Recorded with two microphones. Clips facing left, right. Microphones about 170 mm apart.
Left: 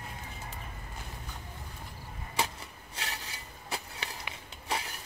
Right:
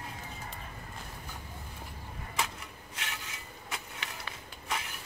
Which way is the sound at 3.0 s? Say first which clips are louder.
Left 2 dB; 35° left (ahead or behind).